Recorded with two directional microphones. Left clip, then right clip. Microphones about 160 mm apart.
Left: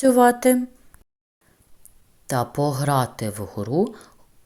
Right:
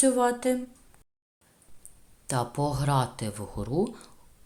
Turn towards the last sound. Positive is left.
turn(degrees=20)  # may be behind; listen again after turning